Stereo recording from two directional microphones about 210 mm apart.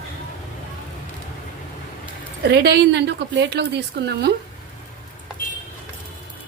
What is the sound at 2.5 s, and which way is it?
A woman's voice, 55° right (ahead or behind).